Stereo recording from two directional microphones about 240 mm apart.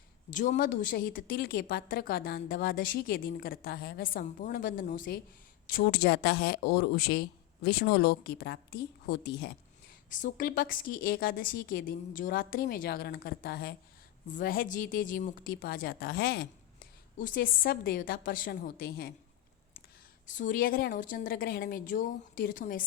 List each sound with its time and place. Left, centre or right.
0.3 s speech: left
10.1 s speech: left
20.2 s speech: left